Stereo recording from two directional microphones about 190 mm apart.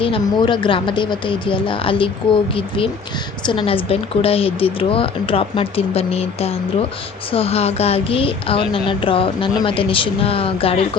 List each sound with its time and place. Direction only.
0.0 s a woman's voice: 25° left (ahead or behind)